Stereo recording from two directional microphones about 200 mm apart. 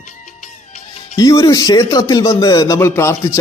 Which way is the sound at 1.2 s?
20° left (ahead or behind).